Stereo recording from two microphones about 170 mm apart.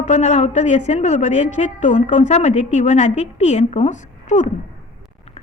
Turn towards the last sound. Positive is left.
turn(degrees=45)  # may be behind; listen again after turning